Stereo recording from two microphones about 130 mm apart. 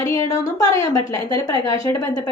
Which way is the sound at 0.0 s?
25° left (ahead or behind).